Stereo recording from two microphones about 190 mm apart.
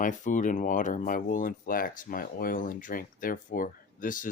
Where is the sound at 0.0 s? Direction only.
40° left (ahead or behind).